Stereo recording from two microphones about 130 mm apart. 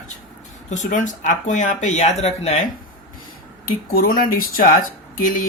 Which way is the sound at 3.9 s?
90° left.